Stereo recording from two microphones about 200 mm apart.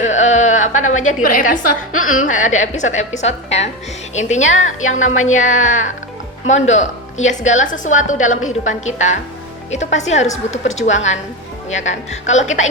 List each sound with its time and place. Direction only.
0.0 s a sound: 35° left (ahead or behind)
0.9 s a woman's voice: 90° left
1.2 s a woman's voice: 40° left (ahead or behind)
1.9 s a woman's voice: 90° left
2.4 s a woman's voice: 35° left (ahead or behind)
4.6 s a woman's voice: 80° left
5.4 s a woman's voice: 40° left (ahead or behind)